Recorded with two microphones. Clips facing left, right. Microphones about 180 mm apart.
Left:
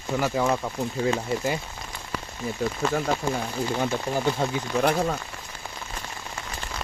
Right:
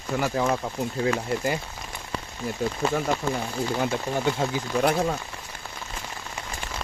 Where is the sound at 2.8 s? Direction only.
30° right (ahead or behind).